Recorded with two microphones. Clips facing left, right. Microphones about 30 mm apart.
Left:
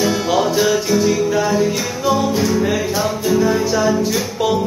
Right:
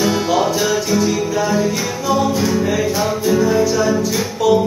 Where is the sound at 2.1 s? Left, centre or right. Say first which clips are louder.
Right 2 dB; centre.